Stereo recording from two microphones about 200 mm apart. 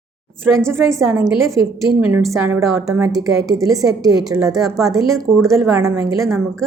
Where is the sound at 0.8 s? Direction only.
15° right (ahead or behind).